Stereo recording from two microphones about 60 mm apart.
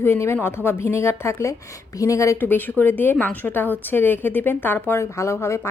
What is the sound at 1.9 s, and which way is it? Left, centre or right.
Speech, left.